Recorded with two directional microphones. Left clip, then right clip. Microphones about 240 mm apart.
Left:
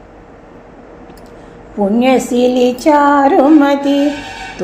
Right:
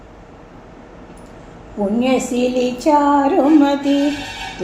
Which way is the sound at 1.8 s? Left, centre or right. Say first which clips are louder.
Left 6 dB; left.